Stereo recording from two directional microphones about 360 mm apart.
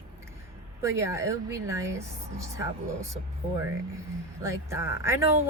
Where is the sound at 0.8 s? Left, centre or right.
Centre.